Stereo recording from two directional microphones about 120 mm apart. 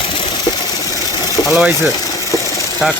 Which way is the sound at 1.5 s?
5° right (ahead or behind).